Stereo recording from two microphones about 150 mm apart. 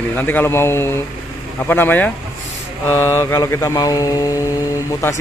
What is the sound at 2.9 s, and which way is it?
Mantra, 15° left (ahead or behind).